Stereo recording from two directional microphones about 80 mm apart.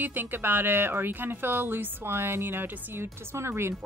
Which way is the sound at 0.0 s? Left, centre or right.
Right.